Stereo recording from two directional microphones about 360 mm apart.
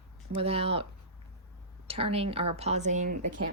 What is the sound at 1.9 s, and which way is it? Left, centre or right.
Speech, centre.